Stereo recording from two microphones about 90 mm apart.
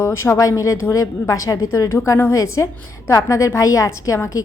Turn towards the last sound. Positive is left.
turn(degrees=35)  # may be behind; listen again after turning